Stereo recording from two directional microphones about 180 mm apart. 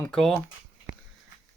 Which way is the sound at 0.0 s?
5° left (ahead or behind).